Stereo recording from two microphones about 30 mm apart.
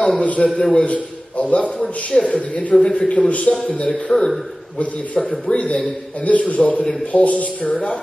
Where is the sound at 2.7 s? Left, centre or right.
Left.